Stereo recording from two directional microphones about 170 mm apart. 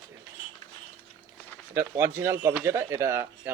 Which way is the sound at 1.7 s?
15° right (ahead or behind).